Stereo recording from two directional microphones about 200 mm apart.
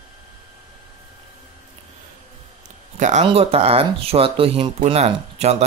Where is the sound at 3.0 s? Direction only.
35° right (ahead or behind).